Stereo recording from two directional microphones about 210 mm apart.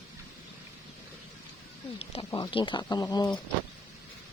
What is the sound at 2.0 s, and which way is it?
Speech, 25° left (ahead or behind).